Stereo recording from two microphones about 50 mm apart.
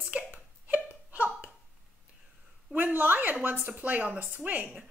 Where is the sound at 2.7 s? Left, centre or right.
Right.